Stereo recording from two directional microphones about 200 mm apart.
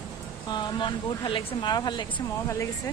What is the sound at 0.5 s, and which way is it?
Speech, 25° left (ahead or behind).